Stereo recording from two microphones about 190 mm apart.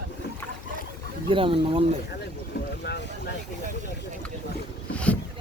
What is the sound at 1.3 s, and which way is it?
Speech, 30° right (ahead or behind).